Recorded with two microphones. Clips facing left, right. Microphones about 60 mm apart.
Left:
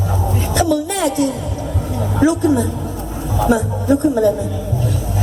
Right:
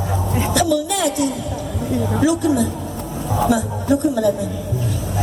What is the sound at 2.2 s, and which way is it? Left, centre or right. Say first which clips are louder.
Speech: left 4 dB; left.